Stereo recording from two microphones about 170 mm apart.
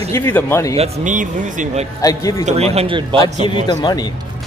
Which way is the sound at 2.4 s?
35° right (ahead or behind).